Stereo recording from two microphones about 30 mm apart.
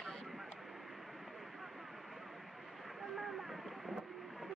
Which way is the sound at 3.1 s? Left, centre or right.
Centre.